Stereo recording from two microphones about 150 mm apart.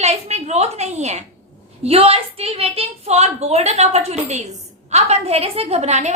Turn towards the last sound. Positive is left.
turn(degrees=-50)  # may be behind; listen again after turning